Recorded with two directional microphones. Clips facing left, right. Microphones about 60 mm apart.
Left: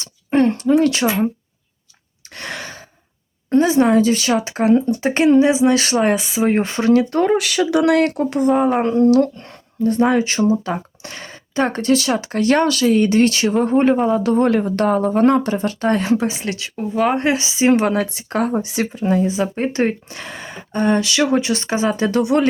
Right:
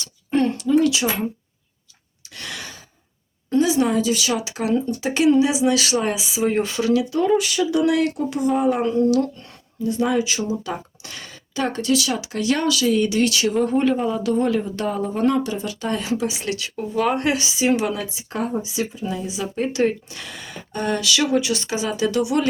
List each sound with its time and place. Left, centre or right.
0.0 s a sound: left
2.3 s gasp: left
3.5 s speech: left
7.3 s speech: left
16.4 s speech: left